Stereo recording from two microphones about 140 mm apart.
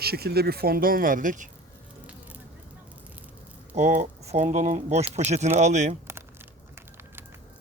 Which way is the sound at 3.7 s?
55° right (ahead or behind).